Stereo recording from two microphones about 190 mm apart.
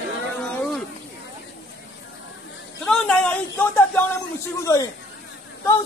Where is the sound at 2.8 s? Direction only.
5° left (ahead or behind).